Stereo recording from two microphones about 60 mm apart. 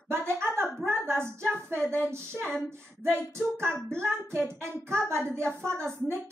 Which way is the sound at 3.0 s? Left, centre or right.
Right.